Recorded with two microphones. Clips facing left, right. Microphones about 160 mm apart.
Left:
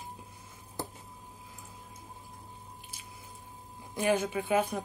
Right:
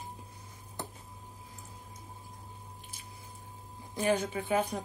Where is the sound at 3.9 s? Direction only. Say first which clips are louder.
Left 1 dB; 15° left (ahead or behind).